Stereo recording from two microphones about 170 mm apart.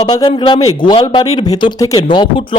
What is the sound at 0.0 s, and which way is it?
A man's voice, 30° left (ahead or behind).